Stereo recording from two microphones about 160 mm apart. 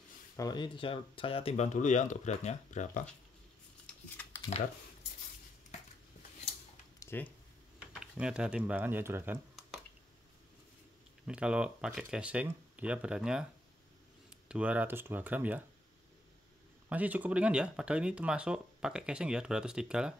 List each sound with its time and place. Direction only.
0.4 s speech: 25° left (ahead or behind); by 3.1 s 50° left (ahead or behind)
3.8 s scissors: 10° left (ahead or behind)
7.0 s speech: 15° left (ahead or behind)
8.0 s speech: 5° right (ahead or behind)
11.2 s speech: 5° right (ahead or behind)
14.5 s speech: 10° right (ahead or behind)
16.9 s speech: 10° right (ahead or behind)